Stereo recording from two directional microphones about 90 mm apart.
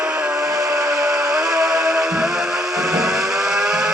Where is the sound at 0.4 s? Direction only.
40° right (ahead or behind).